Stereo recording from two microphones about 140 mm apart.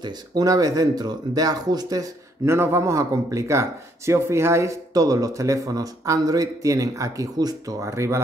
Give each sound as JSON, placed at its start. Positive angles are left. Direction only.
{"t": 0.0, "sound": "speech", "side_deg": -30}